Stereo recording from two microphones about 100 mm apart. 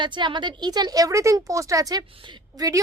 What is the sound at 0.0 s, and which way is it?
Speech, 50° right (ahead or behind).